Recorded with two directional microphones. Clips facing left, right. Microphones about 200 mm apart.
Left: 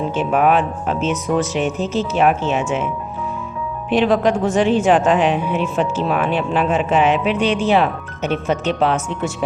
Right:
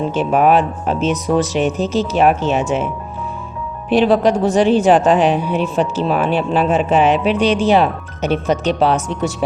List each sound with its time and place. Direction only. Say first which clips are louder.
0.1 s speech: right 3 dB; 35° right (ahead or behind)